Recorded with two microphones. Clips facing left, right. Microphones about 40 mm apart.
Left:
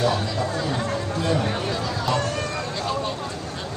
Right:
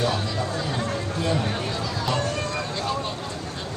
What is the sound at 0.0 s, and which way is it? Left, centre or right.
Speech, left.